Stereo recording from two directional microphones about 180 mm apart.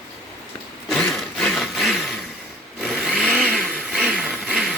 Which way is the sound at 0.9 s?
5° left (ahead or behind).